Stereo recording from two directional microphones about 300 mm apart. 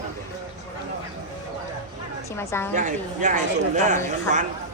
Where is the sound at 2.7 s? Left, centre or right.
Right.